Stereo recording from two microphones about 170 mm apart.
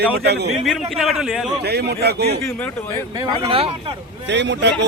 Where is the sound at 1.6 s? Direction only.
70° right (ahead or behind).